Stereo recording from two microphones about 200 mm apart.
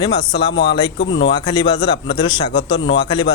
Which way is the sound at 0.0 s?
20° left (ahead or behind).